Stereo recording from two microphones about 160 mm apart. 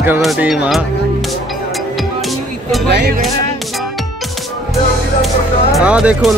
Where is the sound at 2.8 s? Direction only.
85° right.